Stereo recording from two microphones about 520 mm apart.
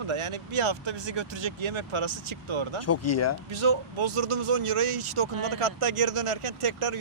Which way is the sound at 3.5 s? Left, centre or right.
Right.